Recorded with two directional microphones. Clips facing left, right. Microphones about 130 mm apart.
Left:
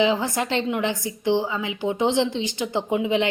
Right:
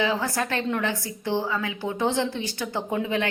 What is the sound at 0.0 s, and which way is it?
A woman's voice, 20° left (ahead or behind).